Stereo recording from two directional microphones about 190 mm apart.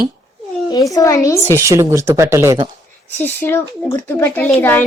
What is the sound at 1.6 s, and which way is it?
Speech, 15° right (ahead or behind).